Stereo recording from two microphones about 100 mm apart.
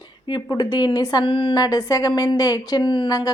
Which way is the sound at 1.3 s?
60° left (ahead or behind).